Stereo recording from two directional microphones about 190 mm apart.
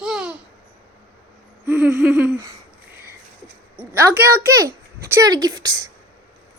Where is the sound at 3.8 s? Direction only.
10° right (ahead or behind).